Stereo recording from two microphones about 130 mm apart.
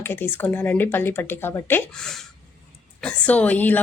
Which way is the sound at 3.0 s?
10° left (ahead or behind).